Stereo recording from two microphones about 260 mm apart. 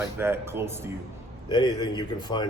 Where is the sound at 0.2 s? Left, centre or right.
Centre.